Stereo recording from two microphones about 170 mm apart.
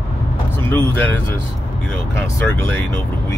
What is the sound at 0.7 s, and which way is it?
Speech, 10° left (ahead or behind).